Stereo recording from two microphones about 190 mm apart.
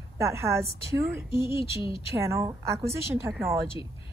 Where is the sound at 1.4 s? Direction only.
30° left (ahead or behind).